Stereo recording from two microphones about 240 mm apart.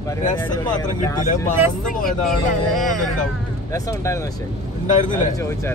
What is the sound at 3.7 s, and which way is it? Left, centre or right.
Speech, centre.